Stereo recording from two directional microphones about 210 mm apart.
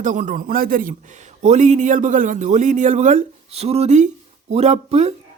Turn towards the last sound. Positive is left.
turn(degrees=-30)  # may be behind; listen again after turning